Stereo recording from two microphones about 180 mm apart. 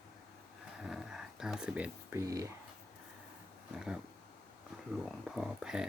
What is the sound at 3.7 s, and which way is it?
Speech, 5° right (ahead or behind).